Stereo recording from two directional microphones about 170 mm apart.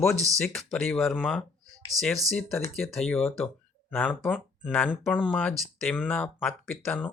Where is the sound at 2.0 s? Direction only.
20° right (ahead or behind).